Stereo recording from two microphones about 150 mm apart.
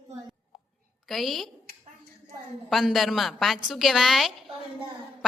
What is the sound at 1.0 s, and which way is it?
Speech, centre (ahead or behind).